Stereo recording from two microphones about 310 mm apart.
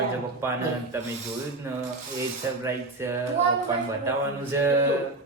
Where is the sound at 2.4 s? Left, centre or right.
Centre.